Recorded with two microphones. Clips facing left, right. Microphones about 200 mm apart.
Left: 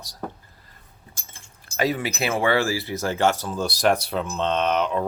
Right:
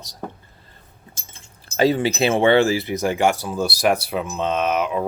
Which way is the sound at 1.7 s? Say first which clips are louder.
Right 6 dB; 30° right (ahead or behind).